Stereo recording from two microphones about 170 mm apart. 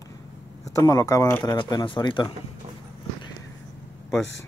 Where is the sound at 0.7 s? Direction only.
20° left (ahead or behind).